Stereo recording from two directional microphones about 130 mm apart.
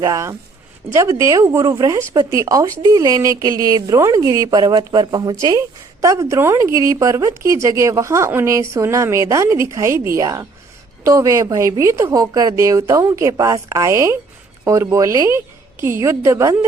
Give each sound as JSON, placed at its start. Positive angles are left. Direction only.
{"t": 0.0, "sound": "speech", "side_deg": -25}